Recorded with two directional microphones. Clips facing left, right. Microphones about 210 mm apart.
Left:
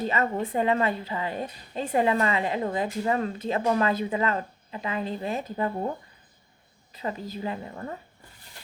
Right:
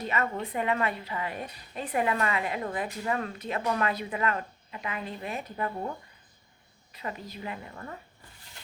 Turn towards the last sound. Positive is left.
turn(degrees=30)  # may be behind; listen again after turning